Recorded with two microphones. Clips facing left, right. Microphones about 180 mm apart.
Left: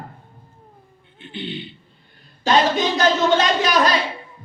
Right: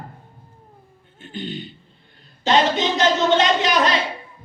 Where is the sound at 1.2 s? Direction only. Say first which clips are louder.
Even; 45° right (ahead or behind).